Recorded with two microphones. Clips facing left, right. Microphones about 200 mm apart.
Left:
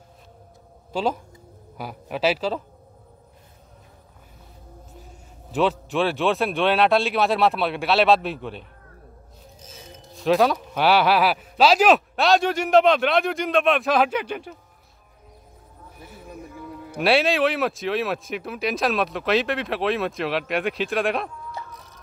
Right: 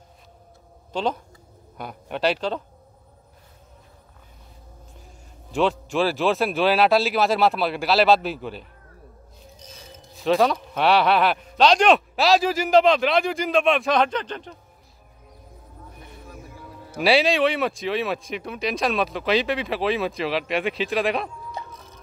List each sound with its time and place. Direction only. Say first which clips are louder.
0.9 s speech: left 1 dB; 5° left (ahead or behind)
4.9 s speech: left 3 dB; centre (ahead or behind)
9.7 s speech: left 3 dB; centre (ahead or behind)
17.0 s speech: right 1 dB; centre (ahead or behind)
21.6 s a sound: right 2 dB; 15° right (ahead or behind)